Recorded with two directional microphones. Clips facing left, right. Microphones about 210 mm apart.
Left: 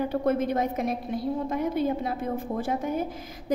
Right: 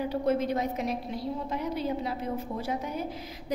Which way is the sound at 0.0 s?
50° left (ahead or behind).